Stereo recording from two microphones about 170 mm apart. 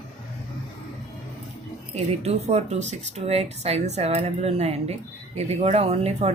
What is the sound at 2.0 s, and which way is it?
Speech, 40° right (ahead or behind).